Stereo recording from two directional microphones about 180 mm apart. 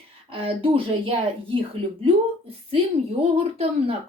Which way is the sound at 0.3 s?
30° right (ahead or behind).